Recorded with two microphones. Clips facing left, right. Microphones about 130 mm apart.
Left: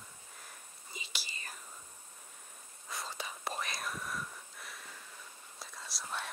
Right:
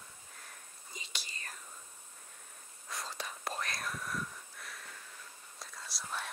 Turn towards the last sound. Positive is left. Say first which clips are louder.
# even
turn(degrees=0)  # may be behind; listen again after turning